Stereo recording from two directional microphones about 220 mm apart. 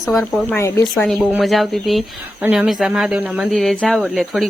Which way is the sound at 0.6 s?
10° left (ahead or behind).